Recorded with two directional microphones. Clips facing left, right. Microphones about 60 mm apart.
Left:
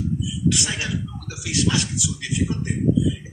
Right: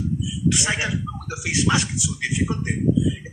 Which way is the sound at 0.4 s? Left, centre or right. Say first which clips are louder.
Right 2 dB; right.